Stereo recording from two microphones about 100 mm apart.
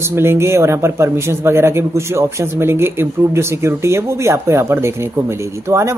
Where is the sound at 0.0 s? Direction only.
25° right (ahead or behind).